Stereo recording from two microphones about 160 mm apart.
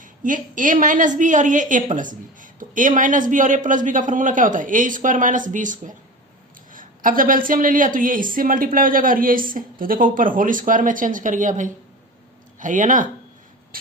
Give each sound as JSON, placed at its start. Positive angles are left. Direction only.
{"t": 0.0, "sound": "a woman's voice", "side_deg": -55}